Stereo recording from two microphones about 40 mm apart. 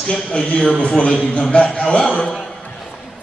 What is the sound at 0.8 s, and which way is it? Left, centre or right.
A man's voice, left.